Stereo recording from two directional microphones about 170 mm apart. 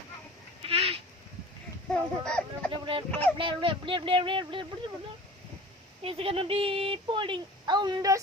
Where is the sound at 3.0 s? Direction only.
10° left (ahead or behind).